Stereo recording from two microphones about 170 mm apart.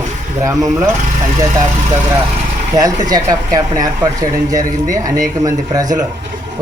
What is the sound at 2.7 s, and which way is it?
Speech, 20° right (ahead or behind).